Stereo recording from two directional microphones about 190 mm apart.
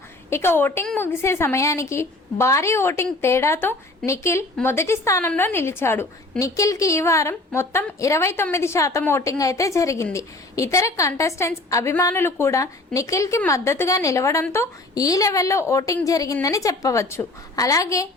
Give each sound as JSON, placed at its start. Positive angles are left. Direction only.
{"t": 0.3, "sound": "a woman's voice", "side_deg": 15}